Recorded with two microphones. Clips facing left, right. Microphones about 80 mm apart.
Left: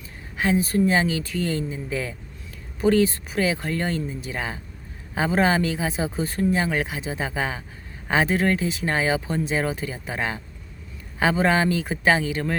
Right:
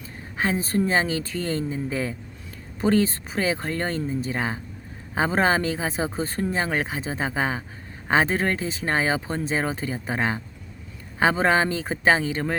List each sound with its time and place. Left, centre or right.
0.3 s speech: right